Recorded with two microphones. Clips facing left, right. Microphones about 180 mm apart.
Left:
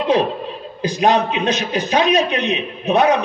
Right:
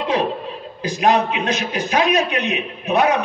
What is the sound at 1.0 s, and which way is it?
A man's voice, 20° left (ahead or behind).